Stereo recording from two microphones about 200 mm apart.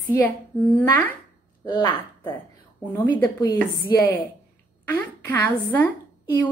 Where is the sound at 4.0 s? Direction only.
10° left (ahead or behind).